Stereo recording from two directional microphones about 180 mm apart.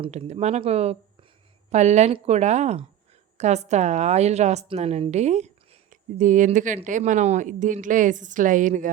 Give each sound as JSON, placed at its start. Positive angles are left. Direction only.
{"t": 0.0, "sound": "a woman's voice", "side_deg": -35}